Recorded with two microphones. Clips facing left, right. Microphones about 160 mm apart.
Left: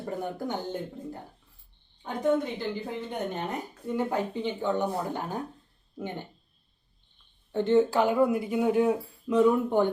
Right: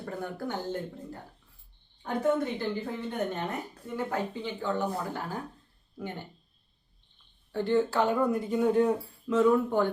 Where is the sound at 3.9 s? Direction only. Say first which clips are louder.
Left 3 dB; 20° left (ahead or behind).